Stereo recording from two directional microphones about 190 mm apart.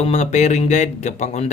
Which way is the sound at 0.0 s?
35° left (ahead or behind).